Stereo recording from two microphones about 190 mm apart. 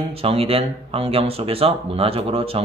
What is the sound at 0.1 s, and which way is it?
Speech, 30° right (ahead or behind).